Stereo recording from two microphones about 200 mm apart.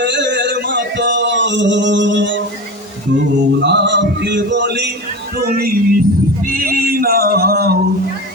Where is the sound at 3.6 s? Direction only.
60° right (ahead or behind).